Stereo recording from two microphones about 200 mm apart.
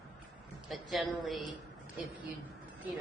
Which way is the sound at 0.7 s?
Centre (ahead or behind).